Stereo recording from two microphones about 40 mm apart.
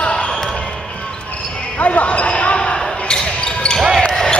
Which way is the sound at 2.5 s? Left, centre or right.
Centre.